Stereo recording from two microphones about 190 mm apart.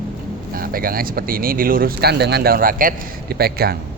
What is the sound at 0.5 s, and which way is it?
A man's voice, 50° right (ahead or behind).